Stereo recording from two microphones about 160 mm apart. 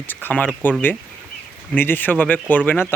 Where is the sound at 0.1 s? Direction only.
10° left (ahead or behind).